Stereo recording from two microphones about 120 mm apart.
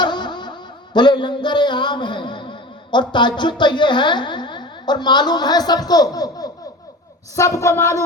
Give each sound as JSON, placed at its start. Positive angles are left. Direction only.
{"t": 0.0, "sound": "music", "side_deg": 40}
{"t": 0.9, "sound": "a man's voice", "side_deg": 40}